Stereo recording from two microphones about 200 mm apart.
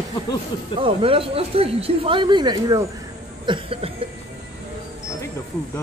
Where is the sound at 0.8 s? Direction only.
25° right (ahead or behind).